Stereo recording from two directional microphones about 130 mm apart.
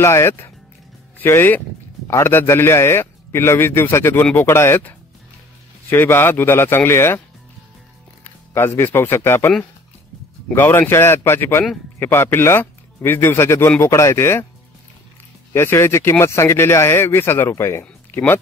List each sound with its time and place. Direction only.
0.0 s speech: 20° left (ahead or behind)
8.2 s speech: 20° left (ahead or behind)
10.5 s speech: 15° left (ahead or behind)
15.5 s speech: 20° left (ahead or behind)